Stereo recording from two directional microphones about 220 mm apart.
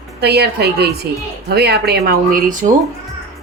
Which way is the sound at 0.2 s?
45° right (ahead or behind).